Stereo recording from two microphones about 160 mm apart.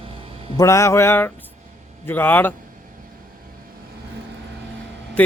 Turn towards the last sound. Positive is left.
turn(degrees=10)  # may be behind; listen again after turning